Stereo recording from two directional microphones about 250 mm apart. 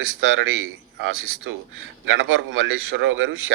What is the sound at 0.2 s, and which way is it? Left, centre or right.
Speech, right.